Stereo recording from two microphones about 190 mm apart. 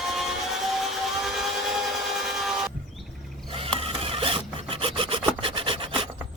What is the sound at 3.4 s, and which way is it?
Filing, 30° right (ahead or behind).